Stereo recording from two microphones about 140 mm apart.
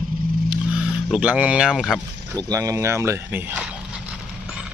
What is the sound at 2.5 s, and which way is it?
Speech, 25° right (ahead or behind).